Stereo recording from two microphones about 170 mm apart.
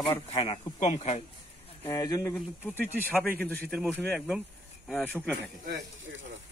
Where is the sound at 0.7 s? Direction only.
40° left (ahead or behind).